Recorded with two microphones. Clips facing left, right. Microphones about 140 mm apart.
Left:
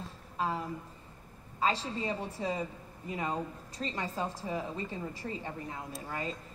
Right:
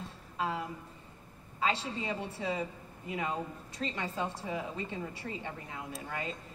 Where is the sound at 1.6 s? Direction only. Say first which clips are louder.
Left 1 dB; 40° left (ahead or behind).